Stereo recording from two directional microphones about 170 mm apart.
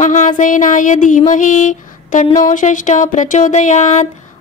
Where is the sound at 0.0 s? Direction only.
45° left (ahead or behind).